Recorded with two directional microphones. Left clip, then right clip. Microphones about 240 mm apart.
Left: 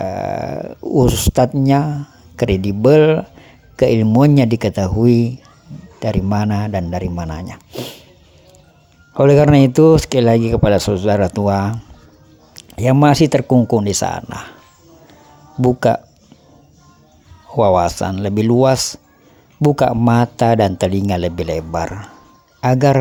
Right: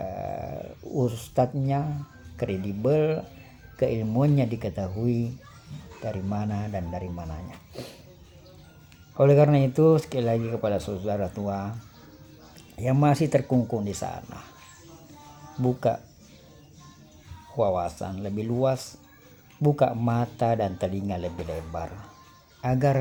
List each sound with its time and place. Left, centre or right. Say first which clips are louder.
0.0 s speech: left 12 dB; left
9.1 s speech: left 9 dB; left
15.6 s speech: left 11 dB; left
17.6 s speech: left 12 dB; left